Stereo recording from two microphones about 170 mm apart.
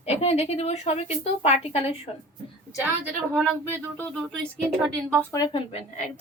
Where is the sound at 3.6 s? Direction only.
10° left (ahead or behind).